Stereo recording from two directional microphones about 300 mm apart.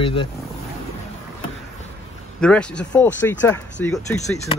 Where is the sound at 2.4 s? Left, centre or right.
Centre.